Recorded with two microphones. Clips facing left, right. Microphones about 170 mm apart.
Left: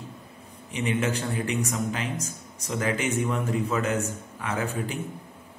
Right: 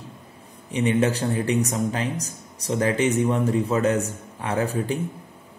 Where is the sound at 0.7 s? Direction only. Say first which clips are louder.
Right 6 dB; 35° right (ahead or behind).